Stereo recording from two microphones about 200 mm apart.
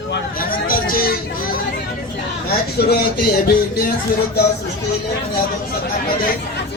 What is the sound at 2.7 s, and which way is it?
Speech, 50° left (ahead or behind).